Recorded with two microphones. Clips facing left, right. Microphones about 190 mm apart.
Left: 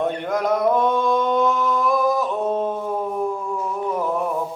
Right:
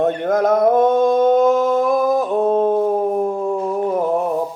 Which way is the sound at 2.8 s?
40° right (ahead or behind).